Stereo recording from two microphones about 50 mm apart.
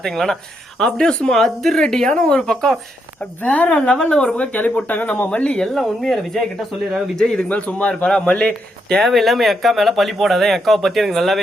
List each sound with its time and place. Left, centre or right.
0.0 s speech: centre
3.2 s a man's voice: left
4.4 s speech: left
5.4 s a man's voice: left
5.6 s speech: centre
7.2 s speech: centre
7.4 s a man's voice: left
8.0 s speech: centre